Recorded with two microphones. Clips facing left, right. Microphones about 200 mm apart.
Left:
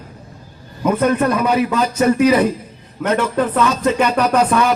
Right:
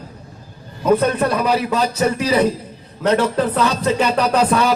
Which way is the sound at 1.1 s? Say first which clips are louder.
Left 2 dB; 35° right (ahead or behind).